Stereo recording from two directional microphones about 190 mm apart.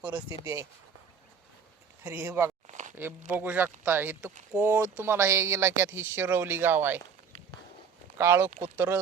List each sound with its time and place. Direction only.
0.0 s speech: 10° right (ahead or behind)
2.0 s speech: 10° right (ahead or behind)
2.6 s a sound: 40° right (ahead or behind)
2.9 s speech: 10° right (ahead or behind)
8.2 s speech: 15° right (ahead or behind)